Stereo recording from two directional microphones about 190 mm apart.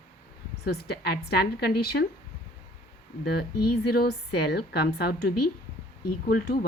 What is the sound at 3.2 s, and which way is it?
A woman's voice, 55° left (ahead or behind).